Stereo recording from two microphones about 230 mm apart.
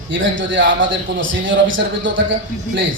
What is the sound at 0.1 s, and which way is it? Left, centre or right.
A man's voice, right.